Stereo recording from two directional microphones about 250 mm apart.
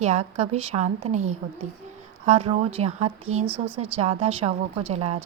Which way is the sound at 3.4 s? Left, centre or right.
Centre.